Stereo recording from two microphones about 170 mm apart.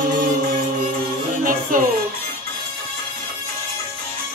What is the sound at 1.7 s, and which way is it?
Music, 55° right (ahead or behind).